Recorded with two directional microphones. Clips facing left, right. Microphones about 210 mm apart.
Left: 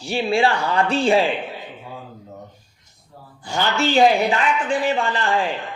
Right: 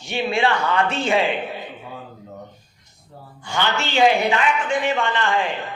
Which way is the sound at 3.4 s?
35° left (ahead or behind).